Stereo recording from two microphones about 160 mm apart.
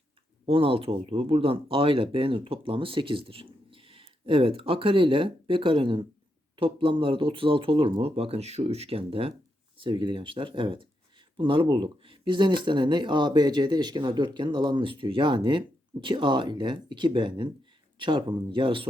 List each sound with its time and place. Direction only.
0.4 s speech: 35° right (ahead or behind)